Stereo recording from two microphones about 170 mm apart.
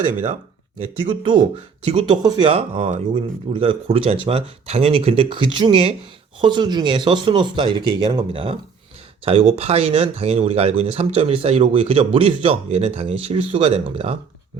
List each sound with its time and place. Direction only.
1.0 s speech: 30° right (ahead or behind)